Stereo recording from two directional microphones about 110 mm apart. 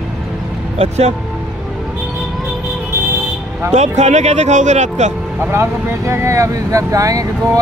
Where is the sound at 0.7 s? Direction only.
90° right.